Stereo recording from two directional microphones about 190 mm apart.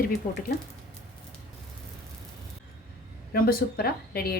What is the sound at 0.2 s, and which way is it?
Speech, 45° left (ahead or behind).